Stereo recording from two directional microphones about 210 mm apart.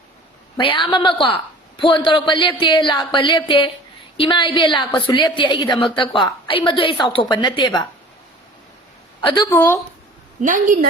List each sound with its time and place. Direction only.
0.5 s a woman's voice: 25° left (ahead or behind)
9.2 s a woman's voice: 20° left (ahead or behind)
9.5 s speech: 10° left (ahead or behind)
10.4 s a woman's voice: 40° right (ahead or behind)